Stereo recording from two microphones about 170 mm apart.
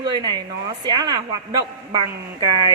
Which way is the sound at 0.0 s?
25° right (ahead or behind).